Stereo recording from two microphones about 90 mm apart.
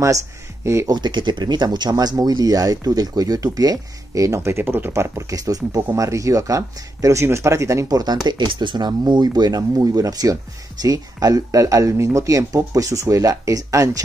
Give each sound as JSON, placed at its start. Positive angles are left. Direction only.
{"t": 0.7, "sound": "speech", "side_deg": -35}
{"t": 0.9, "sound": "speech", "side_deg": -55}